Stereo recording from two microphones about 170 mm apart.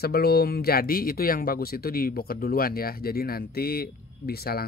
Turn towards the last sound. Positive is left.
turn(degrees=65)  # may be behind; listen again after turning